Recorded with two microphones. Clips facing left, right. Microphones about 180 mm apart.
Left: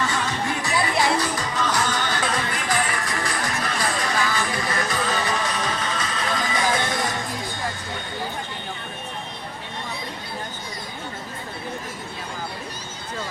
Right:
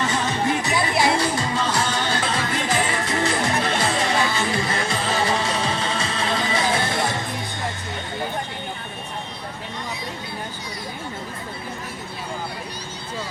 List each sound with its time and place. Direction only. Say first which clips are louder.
0.0 s music: right 3 dB; 20° right (ahead or behind)